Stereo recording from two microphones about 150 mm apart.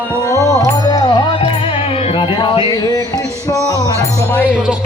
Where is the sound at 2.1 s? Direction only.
30° left (ahead or behind).